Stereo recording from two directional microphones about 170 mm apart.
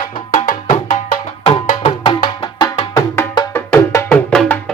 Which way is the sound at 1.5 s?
30° left (ahead or behind).